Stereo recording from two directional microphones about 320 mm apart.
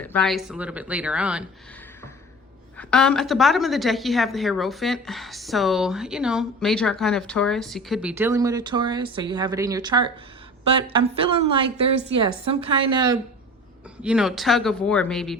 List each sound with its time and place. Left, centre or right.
0.0 s a woman's voice: centre
2.7 s a woman's voice: centre
14.0 s a woman's voice: centre